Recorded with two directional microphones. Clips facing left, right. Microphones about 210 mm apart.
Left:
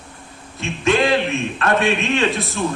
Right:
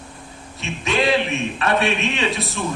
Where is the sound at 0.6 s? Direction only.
55° left (ahead or behind).